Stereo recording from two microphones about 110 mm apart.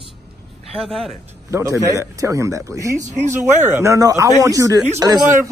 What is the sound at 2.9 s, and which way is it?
Speech, 90° right.